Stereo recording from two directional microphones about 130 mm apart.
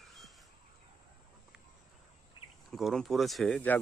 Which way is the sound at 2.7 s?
Centre (ahead or behind).